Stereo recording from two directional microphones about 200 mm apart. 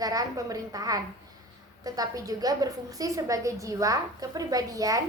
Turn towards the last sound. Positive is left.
turn(degrees=-15)  # may be behind; listen again after turning